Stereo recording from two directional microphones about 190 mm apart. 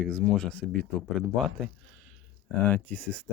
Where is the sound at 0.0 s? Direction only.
Centre (ahead or behind).